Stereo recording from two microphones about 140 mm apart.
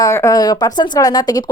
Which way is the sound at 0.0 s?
20° left (ahead or behind).